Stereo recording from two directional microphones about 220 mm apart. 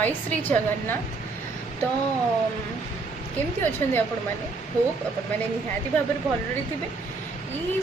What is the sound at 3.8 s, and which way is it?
Speech, 10° left (ahead or behind).